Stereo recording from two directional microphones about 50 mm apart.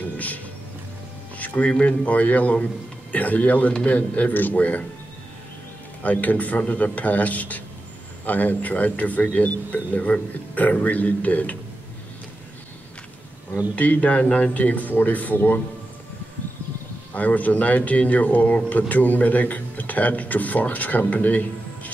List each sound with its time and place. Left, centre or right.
1.4 s a sound: left
1.7 s speech: left
2.5 s speech: left
3.2 s speech: left
6.0 s speech: left
13.7 s speech: left
17.1 s speech: left
21.1 s a sound: left